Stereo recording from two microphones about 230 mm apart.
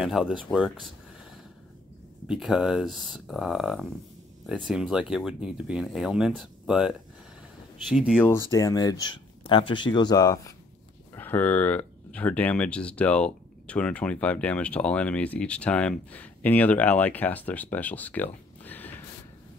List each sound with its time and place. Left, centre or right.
0.0 s speech: centre
2.2 s speech: centre
8.3 s speech: centre